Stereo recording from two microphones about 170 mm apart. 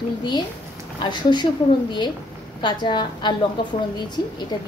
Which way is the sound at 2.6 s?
25° left (ahead or behind).